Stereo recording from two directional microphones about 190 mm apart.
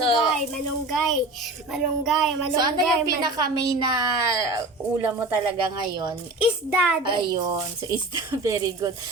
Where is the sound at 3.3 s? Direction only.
20° right (ahead or behind).